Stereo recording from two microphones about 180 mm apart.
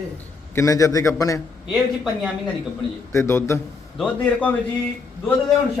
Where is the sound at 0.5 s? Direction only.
20° left (ahead or behind).